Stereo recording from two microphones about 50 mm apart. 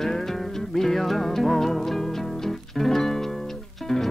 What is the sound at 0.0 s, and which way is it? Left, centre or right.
Music, centre.